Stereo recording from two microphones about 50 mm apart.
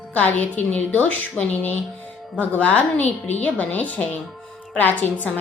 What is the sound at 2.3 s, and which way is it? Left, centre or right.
A woman's voice, left.